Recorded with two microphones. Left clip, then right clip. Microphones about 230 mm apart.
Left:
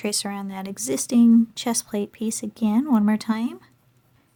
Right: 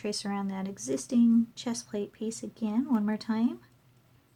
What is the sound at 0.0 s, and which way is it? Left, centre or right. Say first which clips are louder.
Speech: left 6 dB; left.